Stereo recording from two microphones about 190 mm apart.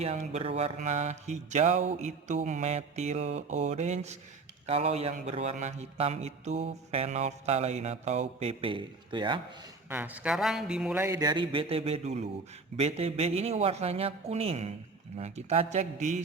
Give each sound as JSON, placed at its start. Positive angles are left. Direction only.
{"t": 0.3, "sound": "a man's voice", "side_deg": -35}
{"t": 9.9, "sound": "a man's voice", "side_deg": -10}